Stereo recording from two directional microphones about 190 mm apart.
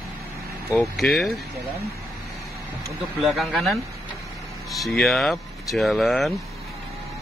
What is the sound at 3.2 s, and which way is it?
Speech, centre (ahead or behind).